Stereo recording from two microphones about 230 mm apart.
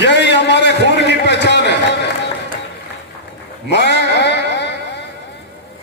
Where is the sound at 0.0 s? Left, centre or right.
Left.